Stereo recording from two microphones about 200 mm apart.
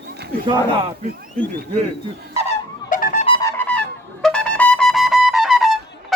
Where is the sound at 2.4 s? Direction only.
40° left (ahead or behind).